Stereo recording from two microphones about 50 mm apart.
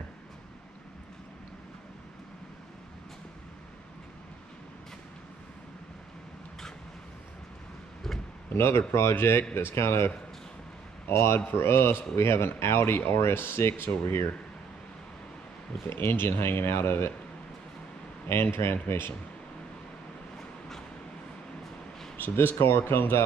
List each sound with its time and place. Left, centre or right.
8.5 s speech: left
9.4 s speech: left
9.8 s speech: left
15.9 s speech: left
18.3 s speech: left
22.1 s speech: left